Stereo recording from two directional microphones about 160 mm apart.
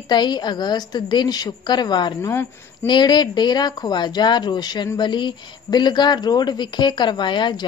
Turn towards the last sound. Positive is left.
turn(degrees=30)  # may be behind; listen again after turning